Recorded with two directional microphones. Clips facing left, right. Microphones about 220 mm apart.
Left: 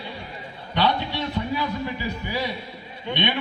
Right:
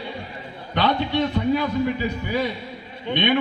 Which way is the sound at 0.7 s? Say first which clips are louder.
Right 3 dB; 50° right (ahead or behind).